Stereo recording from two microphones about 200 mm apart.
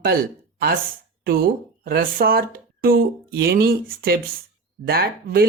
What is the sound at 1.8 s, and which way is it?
Speech, 45° right (ahead or behind).